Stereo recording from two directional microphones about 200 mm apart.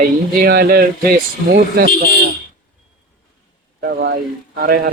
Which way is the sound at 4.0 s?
55° right (ahead or behind).